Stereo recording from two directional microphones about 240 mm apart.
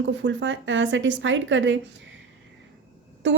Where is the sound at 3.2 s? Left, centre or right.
Right.